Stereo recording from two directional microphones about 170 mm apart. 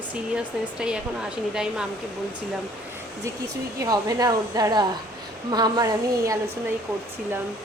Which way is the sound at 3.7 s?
20° right (ahead or behind).